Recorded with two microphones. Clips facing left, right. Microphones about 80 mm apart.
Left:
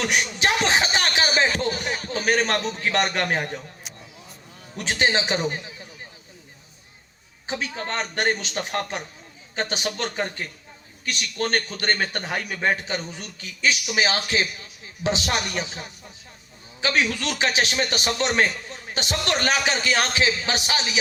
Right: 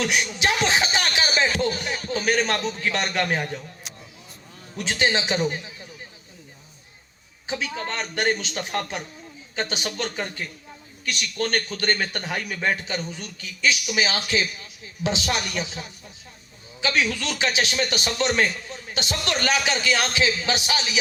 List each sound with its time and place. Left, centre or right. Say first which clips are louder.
0.0 s a man's voice: even; left
4.8 s a man's voice: left 1 dB; left
7.4 s a man's voice: even; left